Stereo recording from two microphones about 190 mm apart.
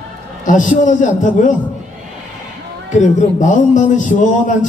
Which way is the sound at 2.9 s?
40° left (ahead or behind).